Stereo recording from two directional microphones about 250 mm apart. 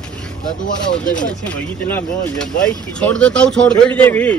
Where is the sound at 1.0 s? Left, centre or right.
Left.